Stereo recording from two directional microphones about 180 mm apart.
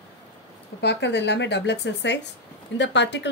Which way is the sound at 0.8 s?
70° left (ahead or behind).